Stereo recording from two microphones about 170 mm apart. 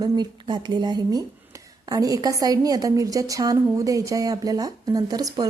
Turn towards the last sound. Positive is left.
turn(degrees=-20)  # may be behind; listen again after turning